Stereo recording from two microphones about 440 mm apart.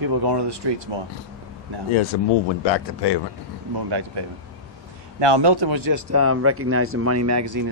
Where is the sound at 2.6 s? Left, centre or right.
Left.